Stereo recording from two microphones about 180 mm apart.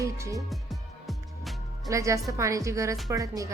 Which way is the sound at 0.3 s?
Centre (ahead or behind).